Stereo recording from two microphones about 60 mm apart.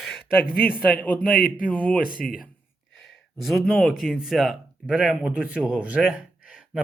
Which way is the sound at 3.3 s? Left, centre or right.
Centre.